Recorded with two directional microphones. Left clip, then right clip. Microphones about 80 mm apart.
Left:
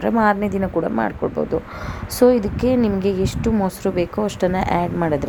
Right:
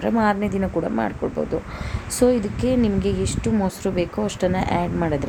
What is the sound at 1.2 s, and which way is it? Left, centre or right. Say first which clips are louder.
A woman's voice: left 3 dB; left.